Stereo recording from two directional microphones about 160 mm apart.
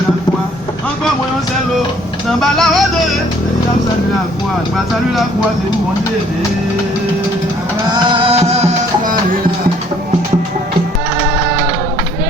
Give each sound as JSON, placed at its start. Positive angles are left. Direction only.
{"t": 2.4, "sound": "vehicle", "side_deg": 0}
{"t": 8.1, "sound": "music", "side_deg": -35}